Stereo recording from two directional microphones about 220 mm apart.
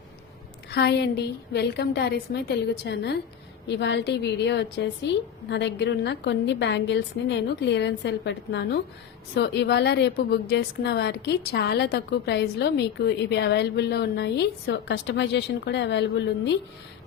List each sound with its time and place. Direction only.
0.7 s a woman's voice: 50° left (ahead or behind)